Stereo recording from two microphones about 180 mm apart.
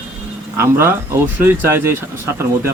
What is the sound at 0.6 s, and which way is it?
Speech, 15° right (ahead or behind).